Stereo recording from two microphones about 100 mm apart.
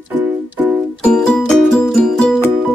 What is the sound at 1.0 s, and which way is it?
Music, 10° left (ahead or behind).